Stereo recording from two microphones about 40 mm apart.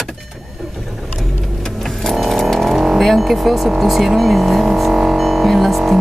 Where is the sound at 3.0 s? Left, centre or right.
Centre.